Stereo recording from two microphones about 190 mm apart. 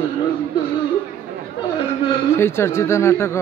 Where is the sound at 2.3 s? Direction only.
15° left (ahead or behind).